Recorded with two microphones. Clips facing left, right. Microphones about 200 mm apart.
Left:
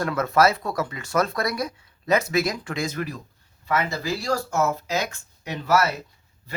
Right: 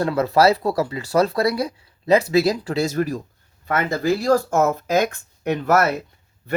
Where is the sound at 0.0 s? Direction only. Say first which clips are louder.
Right 4 dB; 30° right (ahead or behind).